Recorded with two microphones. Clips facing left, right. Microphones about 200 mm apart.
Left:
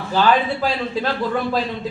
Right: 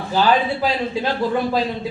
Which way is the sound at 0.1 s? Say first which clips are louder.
Even; 15° right (ahead or behind).